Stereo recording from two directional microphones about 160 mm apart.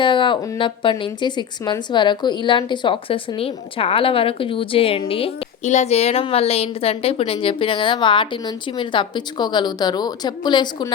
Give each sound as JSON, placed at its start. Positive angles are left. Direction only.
{"t": 0.0, "sound": "a woman's voice", "side_deg": 30}